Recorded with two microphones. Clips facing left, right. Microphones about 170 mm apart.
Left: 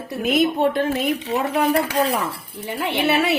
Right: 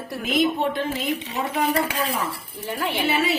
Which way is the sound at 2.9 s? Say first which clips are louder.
Left 4 dB; 70° left (ahead or behind).